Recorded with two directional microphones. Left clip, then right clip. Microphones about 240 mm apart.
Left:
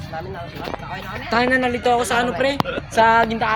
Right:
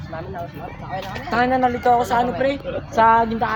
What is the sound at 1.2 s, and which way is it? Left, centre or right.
A woman's voice, left.